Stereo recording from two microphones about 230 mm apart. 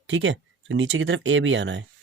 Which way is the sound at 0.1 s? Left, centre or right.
Right.